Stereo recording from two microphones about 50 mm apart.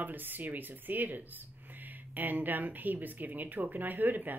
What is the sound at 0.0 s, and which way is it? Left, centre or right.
Speech, right.